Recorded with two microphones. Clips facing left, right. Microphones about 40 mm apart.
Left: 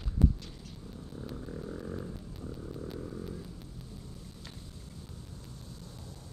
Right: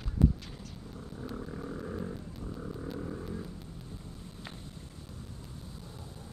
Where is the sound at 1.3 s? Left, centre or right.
Right.